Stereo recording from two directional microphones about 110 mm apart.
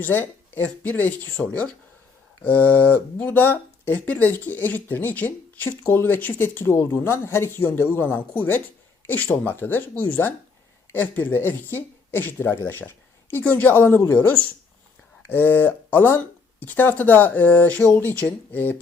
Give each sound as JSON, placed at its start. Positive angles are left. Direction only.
{"t": 0.0, "sound": "speech", "side_deg": 20}